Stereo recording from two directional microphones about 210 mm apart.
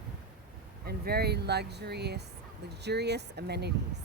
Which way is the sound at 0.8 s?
50° right (ahead or behind).